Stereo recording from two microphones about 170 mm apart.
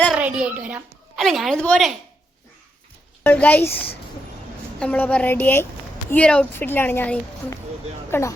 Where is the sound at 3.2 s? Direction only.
10° left (ahead or behind).